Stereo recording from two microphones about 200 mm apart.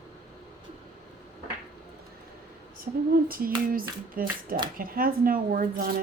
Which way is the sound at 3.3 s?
45° right (ahead or behind).